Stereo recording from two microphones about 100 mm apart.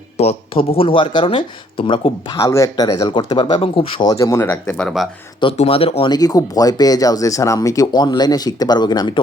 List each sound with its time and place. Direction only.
0.2 s speech: 90° left; by 2.2 s 60° left (ahead or behind)
2.4 s speech: 30° left (ahead or behind); by 4.0 s 60° left (ahead or behind)
4.0 s speech: 35° left (ahead or behind)
4.8 s speech: 5° left (ahead or behind)
5.4 s speech: 65° left (ahead or behind)
6.1 s speech: 40° left (ahead or behind)